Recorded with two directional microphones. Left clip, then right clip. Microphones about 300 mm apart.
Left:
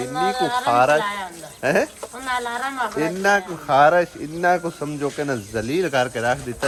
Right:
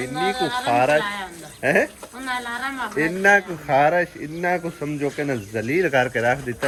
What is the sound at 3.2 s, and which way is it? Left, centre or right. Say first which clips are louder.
Speech: right 2 dB; centre.